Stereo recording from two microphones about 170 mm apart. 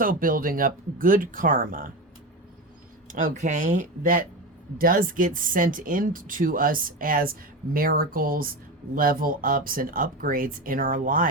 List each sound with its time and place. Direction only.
0.0 s speech: 55° right (ahead or behind)
3.1 s speech: 50° right (ahead or behind)